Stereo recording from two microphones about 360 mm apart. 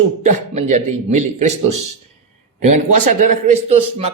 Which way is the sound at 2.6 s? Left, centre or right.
Right.